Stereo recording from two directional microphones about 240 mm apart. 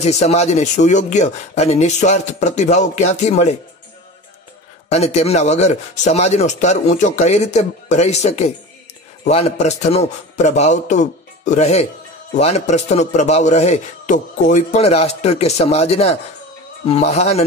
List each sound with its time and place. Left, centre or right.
0.0 s a man's voice: left
4.8 s a man's voice: left